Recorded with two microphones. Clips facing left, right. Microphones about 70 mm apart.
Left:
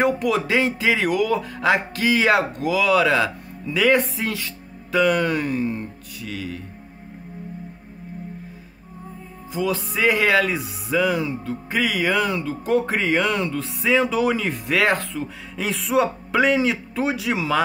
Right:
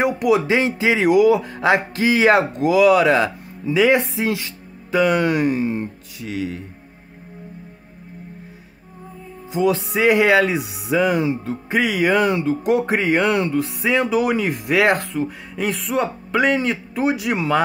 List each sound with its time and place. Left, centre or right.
0.0 s speech: centre
9.5 s speech: right